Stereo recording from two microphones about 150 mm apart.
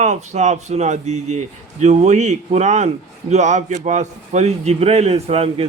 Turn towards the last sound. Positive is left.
turn(degrees=-40)  # may be behind; listen again after turning